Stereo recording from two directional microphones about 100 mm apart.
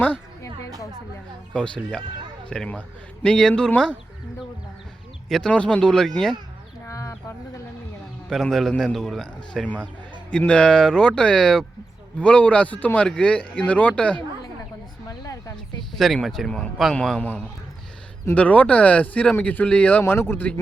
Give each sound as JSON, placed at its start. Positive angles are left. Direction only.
{"t": 1.5, "sound": "speech", "side_deg": 10}
{"t": 5.3, "sound": "speech", "side_deg": 10}
{"t": 6.8, "sound": "bird", "side_deg": 30}
{"t": 8.3, "sound": "a man's voice", "side_deg": 5}
{"t": 15.0, "sound": "a sound", "side_deg": 35}
{"t": 16.0, "sound": "a man's voice", "side_deg": 0}